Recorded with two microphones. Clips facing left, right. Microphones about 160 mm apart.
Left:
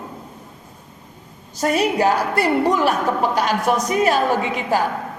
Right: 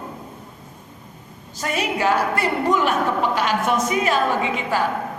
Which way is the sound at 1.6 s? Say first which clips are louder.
Left 5 dB; 40° left (ahead or behind).